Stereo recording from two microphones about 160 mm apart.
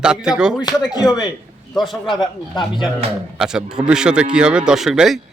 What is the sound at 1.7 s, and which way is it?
Speech, centre (ahead or behind).